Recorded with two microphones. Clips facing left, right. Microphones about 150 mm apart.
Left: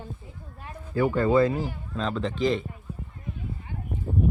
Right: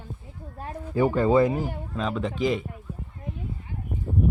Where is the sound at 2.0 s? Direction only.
10° right (ahead or behind).